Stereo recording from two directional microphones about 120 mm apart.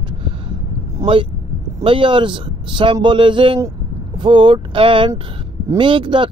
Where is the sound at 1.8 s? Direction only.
45° right (ahead or behind).